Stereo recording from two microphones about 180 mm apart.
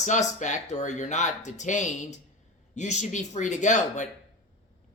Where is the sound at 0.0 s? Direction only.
40° left (ahead or behind).